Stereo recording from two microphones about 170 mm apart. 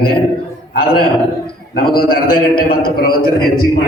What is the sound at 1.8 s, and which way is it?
A man's voice, 60° left (ahead or behind).